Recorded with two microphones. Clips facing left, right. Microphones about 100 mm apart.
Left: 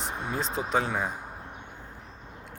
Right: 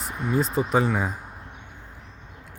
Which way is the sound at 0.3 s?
5° right (ahead or behind).